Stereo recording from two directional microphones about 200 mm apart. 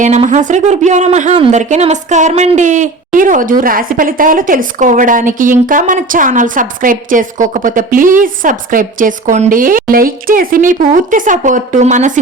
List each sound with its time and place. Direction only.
0.0 s speech: 35° right (ahead or behind)